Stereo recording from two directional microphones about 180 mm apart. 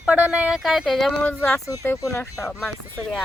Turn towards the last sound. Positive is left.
turn(degrees=5)  # may be behind; listen again after turning